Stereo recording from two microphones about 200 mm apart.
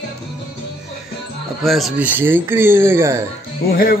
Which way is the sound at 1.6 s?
Centre (ahead or behind).